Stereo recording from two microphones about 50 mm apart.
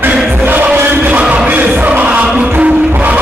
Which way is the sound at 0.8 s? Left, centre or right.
Right.